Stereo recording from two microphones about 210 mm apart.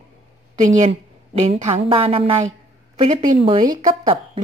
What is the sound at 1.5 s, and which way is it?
A woman's voice, 25° right (ahead or behind).